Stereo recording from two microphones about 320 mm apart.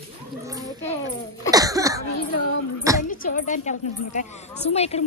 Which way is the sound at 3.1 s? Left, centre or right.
Left.